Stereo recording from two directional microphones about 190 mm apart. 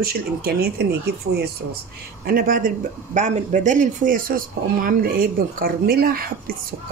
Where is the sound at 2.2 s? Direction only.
50° right (ahead or behind).